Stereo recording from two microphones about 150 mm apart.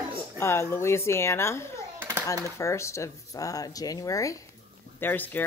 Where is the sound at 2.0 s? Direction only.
15° right (ahead or behind).